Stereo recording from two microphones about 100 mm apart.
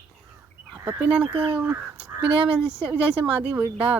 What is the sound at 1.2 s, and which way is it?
Speech, 65° right (ahead or behind).